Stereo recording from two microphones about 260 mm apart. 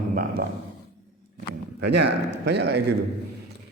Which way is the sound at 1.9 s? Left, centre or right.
Right.